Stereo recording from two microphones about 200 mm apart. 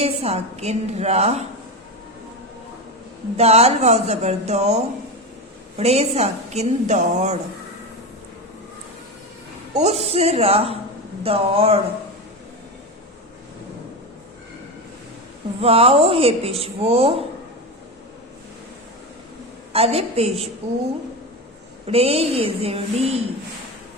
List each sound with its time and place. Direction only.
0.0 s a woman's voice: 30° right (ahead or behind)
3.3 s a woman's voice: 30° right (ahead or behind)
9.7 s a woman's voice: 30° right (ahead or behind)
15.6 s speech: 30° right (ahead or behind)
19.7 s a woman's voice: 30° right (ahead or behind)
21.8 s speech: 30° right (ahead or behind)